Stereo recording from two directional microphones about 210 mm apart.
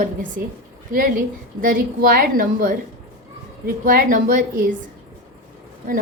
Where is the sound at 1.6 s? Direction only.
40° right (ahead or behind).